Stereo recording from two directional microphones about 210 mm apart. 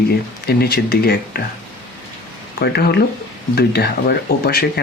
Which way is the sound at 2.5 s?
45° left (ahead or behind).